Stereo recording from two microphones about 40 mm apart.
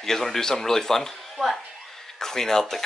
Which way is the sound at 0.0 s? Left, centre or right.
Centre.